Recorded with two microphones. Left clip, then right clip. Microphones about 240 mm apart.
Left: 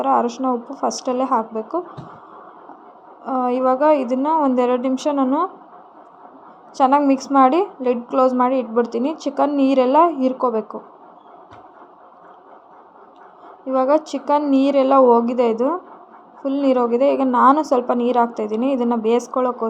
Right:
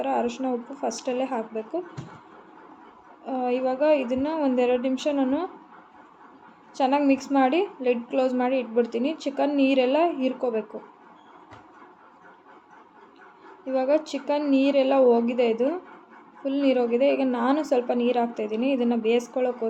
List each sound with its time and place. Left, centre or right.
0.0 s a woman's voice: left
3.2 s a woman's voice: left
6.7 s a woman's voice: left
13.7 s a woman's voice: left